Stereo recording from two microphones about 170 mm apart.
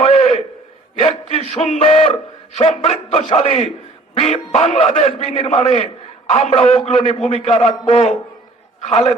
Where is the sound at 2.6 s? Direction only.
35° left (ahead or behind).